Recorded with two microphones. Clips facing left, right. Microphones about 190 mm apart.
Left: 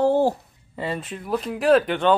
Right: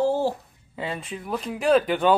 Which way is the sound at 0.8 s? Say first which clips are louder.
Left 2 dB; centre (ahead or behind).